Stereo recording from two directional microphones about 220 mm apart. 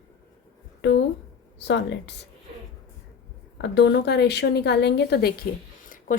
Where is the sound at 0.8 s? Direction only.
50° left (ahead or behind).